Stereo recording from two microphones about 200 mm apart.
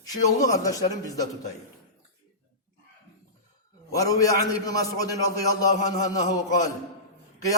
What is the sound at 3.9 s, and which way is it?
Music, 15° left (ahead or behind).